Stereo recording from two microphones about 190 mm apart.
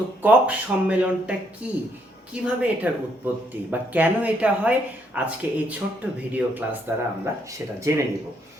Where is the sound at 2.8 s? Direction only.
10° right (ahead or behind).